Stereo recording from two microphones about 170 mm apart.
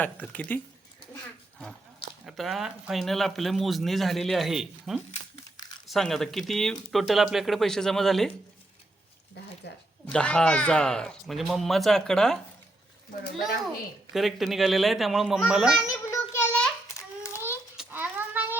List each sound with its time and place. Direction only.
0.0 s speech: 10° left (ahead or behind)
2.2 s speech: centre (ahead or behind)
9.6 s a woman's voice: 75° left (ahead or behind)
10.1 s speech: 5° left (ahead or behind)
14.1 s speech: centre (ahead or behind)
15.8 s children playing: 20° left (ahead or behind)
16.3 s a sound: 10° left (ahead or behind)
17.7 s a sound: 10° right (ahead or behind)